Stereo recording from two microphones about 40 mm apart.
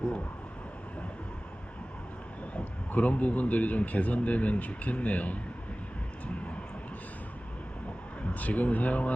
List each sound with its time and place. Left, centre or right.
2.6 s a man's voice: left
8.2 s a man's voice: left